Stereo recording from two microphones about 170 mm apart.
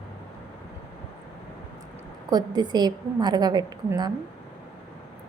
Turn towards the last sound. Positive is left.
turn(degrees=-25)  # may be behind; listen again after turning